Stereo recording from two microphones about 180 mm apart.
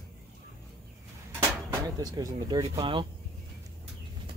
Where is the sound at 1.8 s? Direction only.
20° right (ahead or behind).